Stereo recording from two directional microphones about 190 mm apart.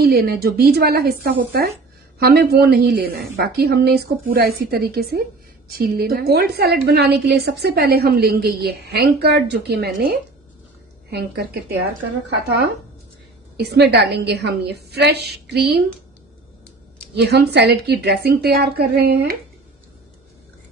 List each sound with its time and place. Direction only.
0.0 s a woman's voice: 55° right (ahead or behind)
13.6 s a woman's voice: 60° right (ahead or behind)
17.1 s a woman's voice: 60° right (ahead or behind)